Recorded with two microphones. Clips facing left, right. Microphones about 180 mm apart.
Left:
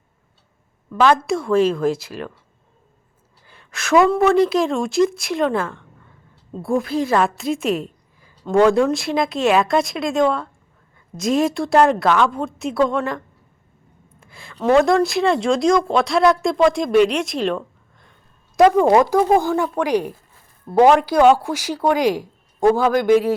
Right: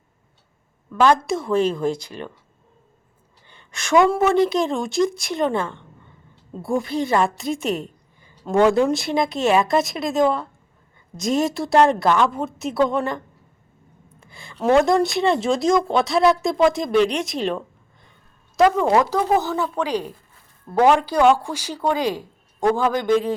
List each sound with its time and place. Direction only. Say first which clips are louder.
0.9 s a woman's voice: left 1 dB; centre (ahead or behind)
3.4 s a sound: left 3 dB; 5° left (ahead or behind)
4.1 s a woman's voice: left 2 dB; centre (ahead or behind)
5.5 s a sound: left 1 dB; 5° left (ahead or behind)
6.6 s a woman's voice: left 2 dB; centre (ahead or behind)
18.5 s speech: left 4 dB; 20° left (ahead or behind)